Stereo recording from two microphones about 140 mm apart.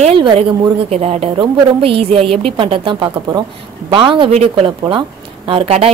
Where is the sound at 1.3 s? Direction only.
35° right (ahead or behind).